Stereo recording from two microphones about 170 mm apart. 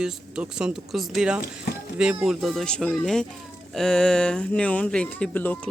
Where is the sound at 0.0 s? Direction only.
5° right (ahead or behind).